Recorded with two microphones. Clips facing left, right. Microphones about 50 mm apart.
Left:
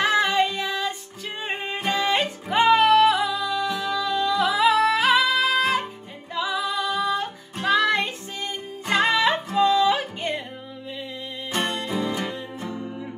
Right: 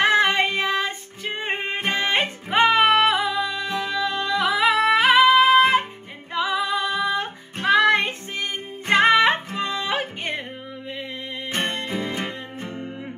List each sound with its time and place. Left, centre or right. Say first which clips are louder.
0.0 s music: right 2 dB; right
11.5 s music: left 1 dB; right